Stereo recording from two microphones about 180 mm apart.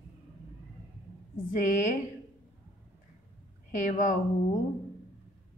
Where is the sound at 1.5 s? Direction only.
45° left (ahead or behind).